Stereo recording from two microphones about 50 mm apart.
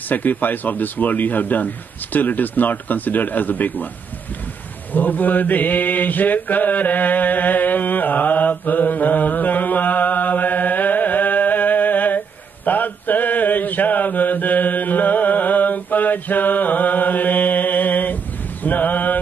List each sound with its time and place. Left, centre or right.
0.1 s speech: left
4.9 s mantra: left